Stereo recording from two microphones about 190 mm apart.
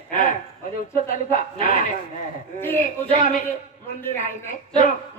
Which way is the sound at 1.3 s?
45° left (ahead or behind).